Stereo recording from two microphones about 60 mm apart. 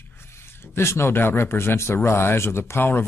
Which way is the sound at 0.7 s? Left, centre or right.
Left.